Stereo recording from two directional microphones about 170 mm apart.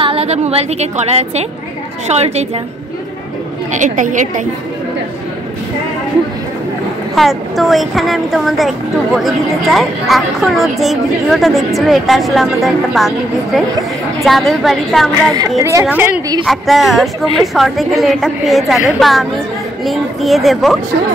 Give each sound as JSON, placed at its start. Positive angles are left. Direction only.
{"t": 0.0, "sound": "a woman's voice", "side_deg": -35}
{"t": 3.7, "sound": "a woman's voice", "side_deg": -45}
{"t": 7.2, "sound": "a woman's voice", "side_deg": 0}
{"t": 14.2, "sound": "a woman's voice", "side_deg": 0}
{"t": 15.3, "sound": "a woman's voice", "side_deg": -20}
{"t": 16.4, "sound": "a woman's voice", "side_deg": 0}